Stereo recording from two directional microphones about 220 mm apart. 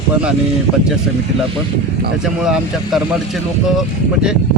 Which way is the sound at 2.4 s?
Centre (ahead or behind).